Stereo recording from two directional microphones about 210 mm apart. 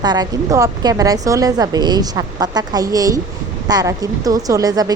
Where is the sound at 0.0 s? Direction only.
20° right (ahead or behind).